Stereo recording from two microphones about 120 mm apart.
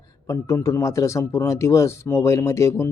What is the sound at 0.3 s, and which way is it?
Speech, 25° left (ahead or behind).